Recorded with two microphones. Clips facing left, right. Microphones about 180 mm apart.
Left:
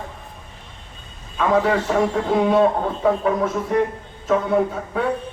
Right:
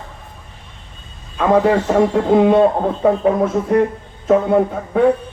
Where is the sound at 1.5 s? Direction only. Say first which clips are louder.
Right 5 dB; 45° right (ahead or behind).